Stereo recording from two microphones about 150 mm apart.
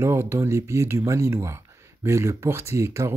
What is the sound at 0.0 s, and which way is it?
Speech, 15° right (ahead or behind).